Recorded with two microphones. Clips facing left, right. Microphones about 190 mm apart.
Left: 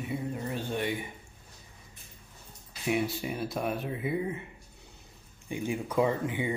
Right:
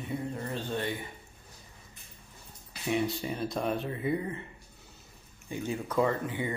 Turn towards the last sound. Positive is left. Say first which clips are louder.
# left 1 dB
turn(degrees=15)  # may be behind; listen again after turning